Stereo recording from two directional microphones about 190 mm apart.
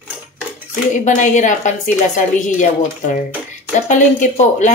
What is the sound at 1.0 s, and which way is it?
A woman's voice, 40° left (ahead or behind).